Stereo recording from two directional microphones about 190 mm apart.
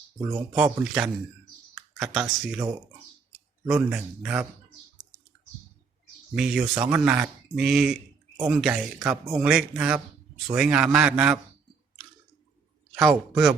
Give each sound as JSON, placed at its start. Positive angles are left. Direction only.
{"t": 0.2, "sound": "speech", "side_deg": -20}
{"t": 0.5, "sound": "a man's voice", "side_deg": -5}
{"t": 1.7, "sound": "computer keyboard", "side_deg": -5}
{"t": 2.4, "sound": "a man's voice", "side_deg": -5}
{"t": 3.8, "sound": "a man's voice", "side_deg": -5}
{"t": 6.3, "sound": "a man's voice", "side_deg": 0}
{"t": 12.9, "sound": "a man's voice", "side_deg": 0}